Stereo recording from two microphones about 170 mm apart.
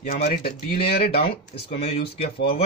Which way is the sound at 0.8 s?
35° left (ahead or behind).